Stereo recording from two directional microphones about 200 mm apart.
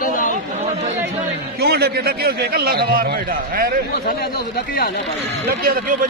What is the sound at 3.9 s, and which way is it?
Speech, 50° left (ahead or behind).